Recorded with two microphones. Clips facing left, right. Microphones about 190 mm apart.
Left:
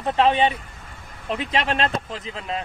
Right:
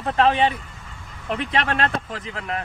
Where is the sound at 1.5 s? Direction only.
25° left (ahead or behind).